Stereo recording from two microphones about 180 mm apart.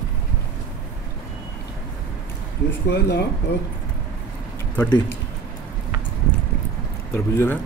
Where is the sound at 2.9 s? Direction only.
65° left (ahead or behind).